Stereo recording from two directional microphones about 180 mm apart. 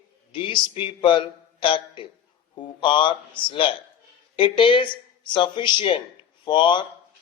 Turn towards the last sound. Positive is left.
turn(degrees=25)  # may be behind; listen again after turning